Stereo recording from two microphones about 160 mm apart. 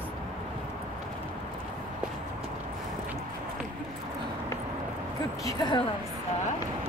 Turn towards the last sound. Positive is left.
turn(degrees=25)  # may be behind; listen again after turning